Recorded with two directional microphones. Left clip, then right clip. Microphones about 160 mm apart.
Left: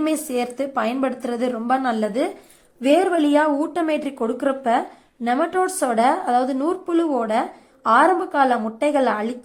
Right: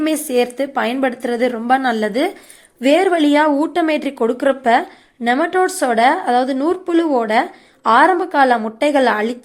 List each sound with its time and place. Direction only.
0.0 s speech: 15° right (ahead or behind)